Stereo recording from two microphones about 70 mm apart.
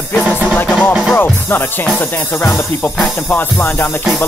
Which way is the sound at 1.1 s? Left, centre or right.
Left.